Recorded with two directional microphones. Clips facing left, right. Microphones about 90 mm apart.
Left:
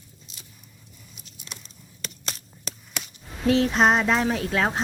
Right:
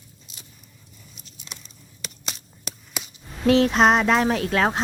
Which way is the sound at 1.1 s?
5° left (ahead or behind).